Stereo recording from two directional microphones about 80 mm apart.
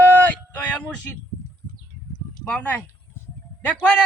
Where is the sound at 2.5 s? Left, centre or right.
Centre.